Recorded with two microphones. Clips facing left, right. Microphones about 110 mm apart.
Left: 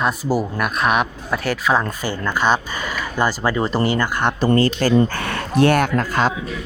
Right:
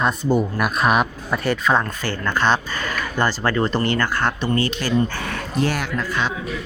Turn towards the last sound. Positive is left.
turn(degrees=45)  # may be behind; listen again after turning